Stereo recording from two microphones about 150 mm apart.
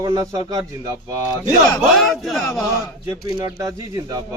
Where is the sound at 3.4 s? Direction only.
20° right (ahead or behind).